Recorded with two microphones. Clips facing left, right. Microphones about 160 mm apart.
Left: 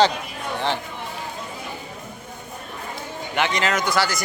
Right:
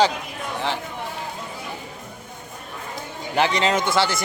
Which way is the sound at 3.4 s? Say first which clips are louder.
Right 3 dB; 30° right (ahead or behind).